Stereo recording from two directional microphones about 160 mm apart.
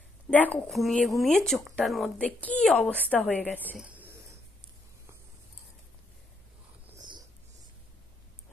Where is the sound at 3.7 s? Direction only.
10° right (ahead or behind).